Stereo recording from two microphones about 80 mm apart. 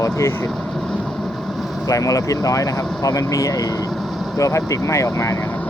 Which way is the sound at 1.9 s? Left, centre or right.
Left.